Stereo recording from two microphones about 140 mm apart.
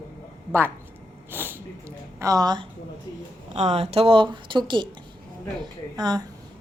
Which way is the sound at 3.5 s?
50° right (ahead or behind).